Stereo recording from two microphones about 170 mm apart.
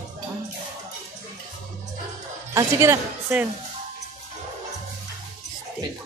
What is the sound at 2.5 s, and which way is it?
Speech, 20° right (ahead or behind).